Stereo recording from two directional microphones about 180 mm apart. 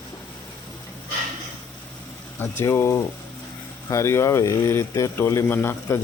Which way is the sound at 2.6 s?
15° left (ahead or behind).